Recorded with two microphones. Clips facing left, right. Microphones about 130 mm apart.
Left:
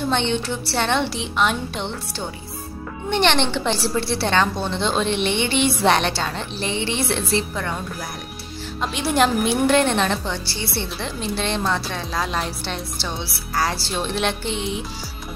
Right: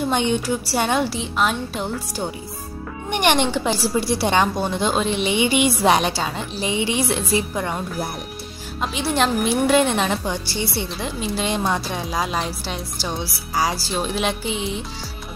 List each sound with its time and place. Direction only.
0.1 s a woman's voice: 10° right (ahead or behind)
8.8 s a woman's voice: centre (ahead or behind)